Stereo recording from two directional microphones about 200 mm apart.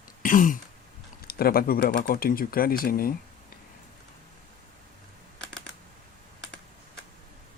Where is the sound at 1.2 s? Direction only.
50° left (ahead or behind).